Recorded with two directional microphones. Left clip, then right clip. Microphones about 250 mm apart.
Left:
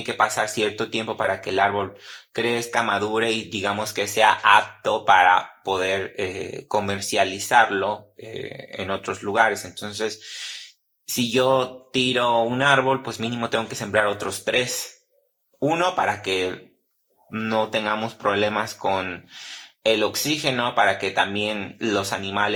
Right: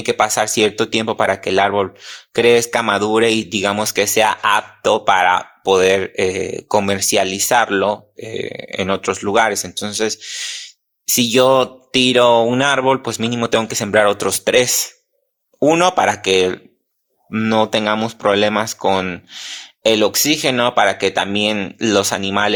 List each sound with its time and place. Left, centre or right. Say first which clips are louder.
0.0 s speech: right 6 dB; right